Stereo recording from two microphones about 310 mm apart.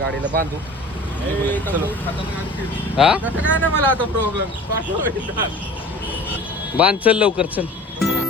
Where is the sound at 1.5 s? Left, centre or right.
Centre.